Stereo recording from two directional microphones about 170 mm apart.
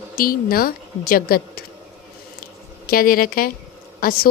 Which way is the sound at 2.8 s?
60° left (ahead or behind).